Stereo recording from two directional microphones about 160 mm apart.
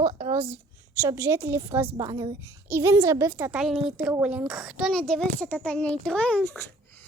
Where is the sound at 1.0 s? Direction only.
15° right (ahead or behind).